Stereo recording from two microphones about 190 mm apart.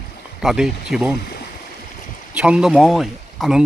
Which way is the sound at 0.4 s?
Centre (ahead or behind).